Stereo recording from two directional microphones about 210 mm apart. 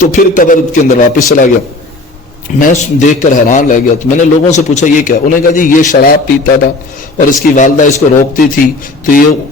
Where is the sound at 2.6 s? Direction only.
40° left (ahead or behind).